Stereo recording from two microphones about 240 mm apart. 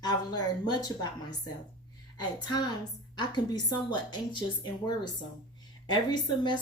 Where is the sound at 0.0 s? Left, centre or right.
Centre.